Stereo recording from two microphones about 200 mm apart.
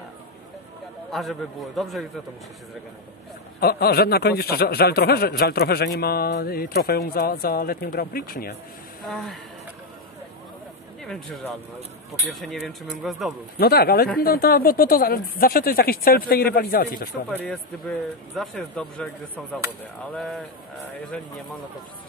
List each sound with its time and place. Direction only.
1.1 s speech: centre (ahead or behind)
3.5 s speech: 50° left (ahead or behind)
9.0 s speech: centre (ahead or behind)
11.1 s speech: centre (ahead or behind)
13.6 s speech: 50° left (ahead or behind)
17.3 s speech: 10° left (ahead or behind)